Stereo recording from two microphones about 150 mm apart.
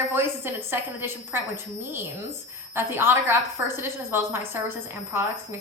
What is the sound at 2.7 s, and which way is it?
A woman's voice, 15° right (ahead or behind).